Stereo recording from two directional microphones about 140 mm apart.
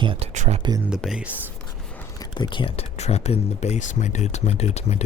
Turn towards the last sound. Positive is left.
turn(degrees=50)  # may be behind; listen again after turning